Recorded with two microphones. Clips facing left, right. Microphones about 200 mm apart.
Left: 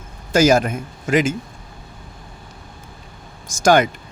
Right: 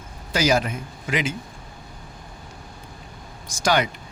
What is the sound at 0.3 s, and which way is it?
A man's voice, 50° left (ahead or behind).